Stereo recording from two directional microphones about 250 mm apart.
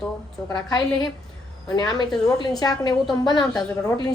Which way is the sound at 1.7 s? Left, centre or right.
Centre.